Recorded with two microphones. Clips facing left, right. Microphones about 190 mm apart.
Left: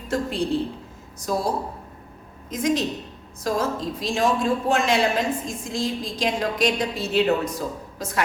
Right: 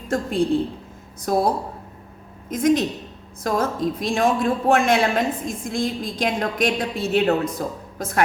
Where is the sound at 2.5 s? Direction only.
55° right (ahead or behind).